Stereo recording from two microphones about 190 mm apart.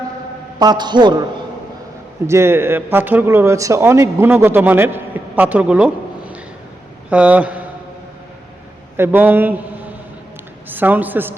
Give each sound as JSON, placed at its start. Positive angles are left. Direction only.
{"t": 0.6, "sound": "a man's voice", "side_deg": -20}
{"t": 9.0, "sound": "a man's voice", "side_deg": -10}
{"t": 10.7, "sound": "a man's voice", "side_deg": -10}